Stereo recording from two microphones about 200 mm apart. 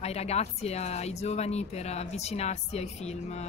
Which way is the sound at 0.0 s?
30° left (ahead or behind).